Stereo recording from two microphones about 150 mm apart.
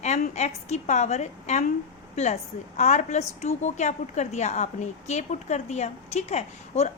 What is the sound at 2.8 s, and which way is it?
A woman's voice, 50° left (ahead or behind).